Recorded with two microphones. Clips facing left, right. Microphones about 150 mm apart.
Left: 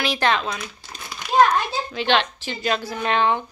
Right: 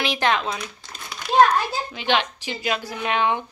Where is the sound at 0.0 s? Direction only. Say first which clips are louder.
Left 1 dB; 15° right (ahead or behind).